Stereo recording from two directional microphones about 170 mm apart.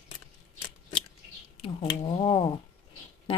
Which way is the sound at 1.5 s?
35° left (ahead or behind).